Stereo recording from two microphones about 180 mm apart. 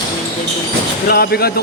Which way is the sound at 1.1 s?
60° left (ahead or behind).